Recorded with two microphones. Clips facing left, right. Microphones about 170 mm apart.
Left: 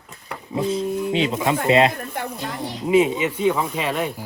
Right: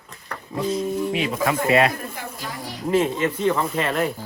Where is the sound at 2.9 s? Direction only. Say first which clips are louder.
Left 3 dB; centre (ahead or behind).